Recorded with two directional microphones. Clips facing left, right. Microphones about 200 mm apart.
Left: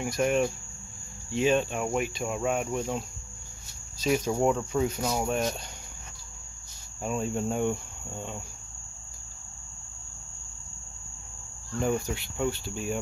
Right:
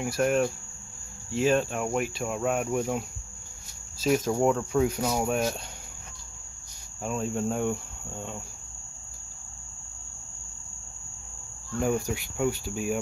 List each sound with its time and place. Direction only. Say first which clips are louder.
0.0 s speech: right 1 dB; 5° right (ahead or behind)
7.0 s speech: even; centre (ahead or behind)
11.8 s speech: right 1 dB; 5° right (ahead or behind)